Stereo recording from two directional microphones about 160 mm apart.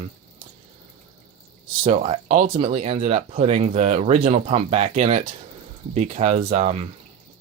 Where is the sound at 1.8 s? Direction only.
45° right (ahead or behind).